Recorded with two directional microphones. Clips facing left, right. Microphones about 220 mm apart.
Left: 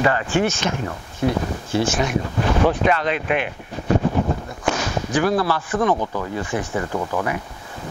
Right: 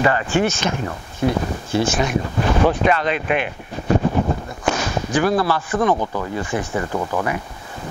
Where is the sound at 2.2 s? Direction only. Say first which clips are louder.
Right 1 dB; 25° right (ahead or behind).